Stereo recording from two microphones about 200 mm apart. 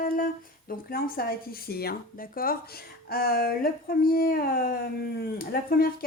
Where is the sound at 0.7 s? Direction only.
45° left (ahead or behind).